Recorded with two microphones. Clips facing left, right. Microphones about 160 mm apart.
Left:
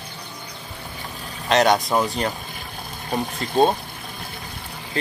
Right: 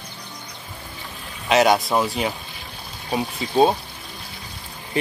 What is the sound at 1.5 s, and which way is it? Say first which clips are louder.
Speech: right 1 dB; 5° right (ahead or behind).